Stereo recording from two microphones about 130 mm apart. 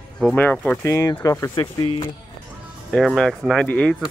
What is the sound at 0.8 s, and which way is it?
Speech, 25° left (ahead or behind).